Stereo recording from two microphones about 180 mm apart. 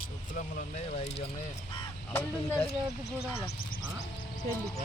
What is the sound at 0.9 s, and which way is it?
Speech, 35° left (ahead or behind).